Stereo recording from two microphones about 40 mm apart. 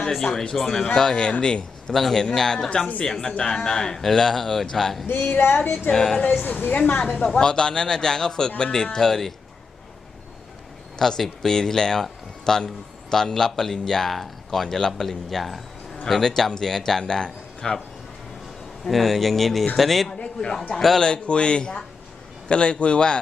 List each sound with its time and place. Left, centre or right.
0.1 s a man's voice: centre
0.9 s speech: centre
1.9 s a man's voice: centre
5.0 s a woman's voice: left
5.4 s child singing: left
5.9 s a man's voice: centre
6.4 s a woman's voice: left
7.3 s a man's voice: left
10.9 s a man's voice: centre
18.9 s speech: centre
20.1 s a man's voice: left
21.0 s speech: left